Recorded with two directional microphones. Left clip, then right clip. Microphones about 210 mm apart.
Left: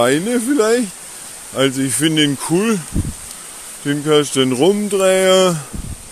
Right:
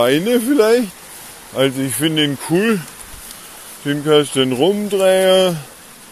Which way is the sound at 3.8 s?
20° left (ahead or behind).